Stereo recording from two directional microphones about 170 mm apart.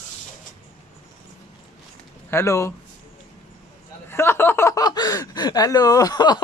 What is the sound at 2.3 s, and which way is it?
Speech, 15° left (ahead or behind).